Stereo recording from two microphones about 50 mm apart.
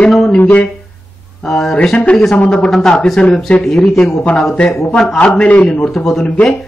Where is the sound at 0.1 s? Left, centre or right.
Centre.